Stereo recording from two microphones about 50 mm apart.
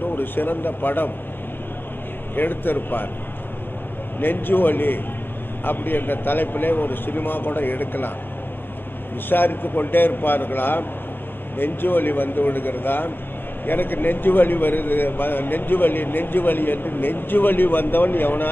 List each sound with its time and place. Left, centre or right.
0.1 s a man's voice: left
2.3 s a man's voice: left
4.2 s a man's voice: left
9.3 s a man's voice: left